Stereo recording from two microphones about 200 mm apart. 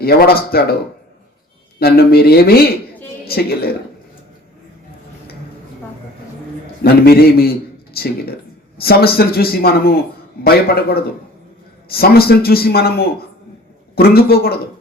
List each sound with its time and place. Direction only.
0.0 s a man's voice: 50° left (ahead or behind)
1.8 s a man's voice: 50° left (ahead or behind)
6.8 s a man's voice: 50° left (ahead or behind)